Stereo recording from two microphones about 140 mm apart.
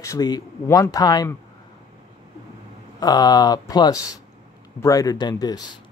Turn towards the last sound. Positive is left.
turn(degrees=30)  # may be behind; listen again after turning